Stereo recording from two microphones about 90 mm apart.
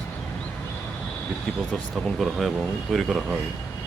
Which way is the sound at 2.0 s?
Centre (ahead or behind).